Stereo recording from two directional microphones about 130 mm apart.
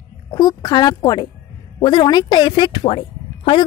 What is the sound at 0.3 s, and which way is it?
A woman's voice, 30° left (ahead or behind).